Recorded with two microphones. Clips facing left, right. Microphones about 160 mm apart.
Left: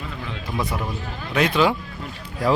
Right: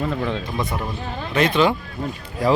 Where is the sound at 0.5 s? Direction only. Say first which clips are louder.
Right 1 dB; 10° left (ahead or behind).